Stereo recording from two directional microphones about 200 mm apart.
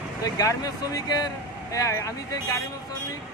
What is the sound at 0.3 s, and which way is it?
Speech, 20° left (ahead or behind).